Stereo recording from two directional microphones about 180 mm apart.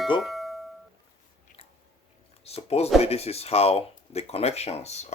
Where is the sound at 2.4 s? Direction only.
35° left (ahead or behind).